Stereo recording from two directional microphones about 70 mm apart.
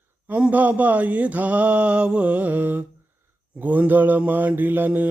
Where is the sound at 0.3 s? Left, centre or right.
Centre.